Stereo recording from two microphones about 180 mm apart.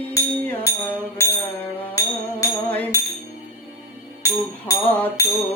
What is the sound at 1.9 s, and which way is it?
Music, 15° left (ahead or behind).